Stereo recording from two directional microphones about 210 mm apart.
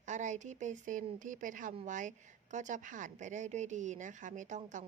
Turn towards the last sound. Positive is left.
turn(degrees=-35)  # may be behind; listen again after turning